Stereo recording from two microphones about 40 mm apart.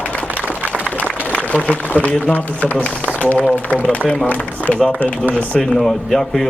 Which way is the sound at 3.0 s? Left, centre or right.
Left.